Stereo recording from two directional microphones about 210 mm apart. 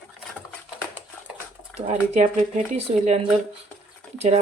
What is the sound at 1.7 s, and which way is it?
Speech, 35° right (ahead or behind).